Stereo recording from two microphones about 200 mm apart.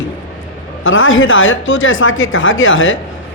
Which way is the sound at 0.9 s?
80° left.